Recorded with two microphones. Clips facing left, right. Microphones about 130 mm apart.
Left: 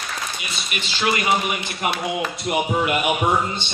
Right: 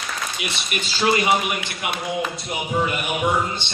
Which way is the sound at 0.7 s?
45° right (ahead or behind).